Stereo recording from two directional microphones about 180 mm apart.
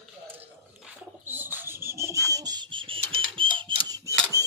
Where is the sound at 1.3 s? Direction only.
10° right (ahead or behind).